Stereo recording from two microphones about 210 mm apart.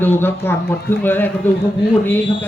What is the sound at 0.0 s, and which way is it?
Speech, 10° left (ahead or behind).